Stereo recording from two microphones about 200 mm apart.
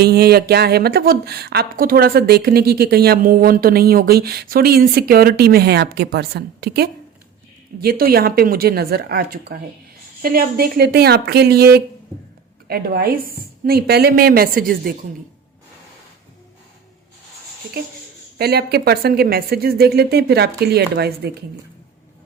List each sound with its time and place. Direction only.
0.0 s speech: 50° right (ahead or behind)
18.3 s speech: 55° right (ahead or behind)